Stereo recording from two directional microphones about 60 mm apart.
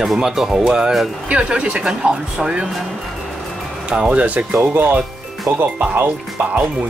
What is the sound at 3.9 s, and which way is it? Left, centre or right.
Speech, centre.